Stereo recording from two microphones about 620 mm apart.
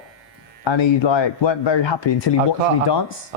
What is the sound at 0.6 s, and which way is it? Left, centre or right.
Speech, left.